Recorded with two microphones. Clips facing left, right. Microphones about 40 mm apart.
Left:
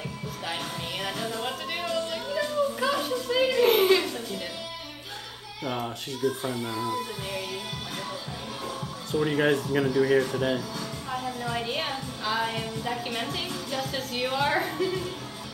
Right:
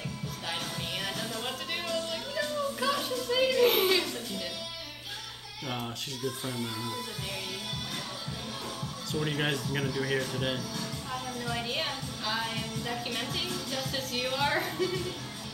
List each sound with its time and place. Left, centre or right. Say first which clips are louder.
1.0 s music: left 4 dB; centre
6.2 s a woman's voice: left 7 dB; centre
9.1 s a woman's voice: left 7 dB; centre
10.8 s music: left 3 dB; centre
11.4 s a woman's voice: left 1 dB; centre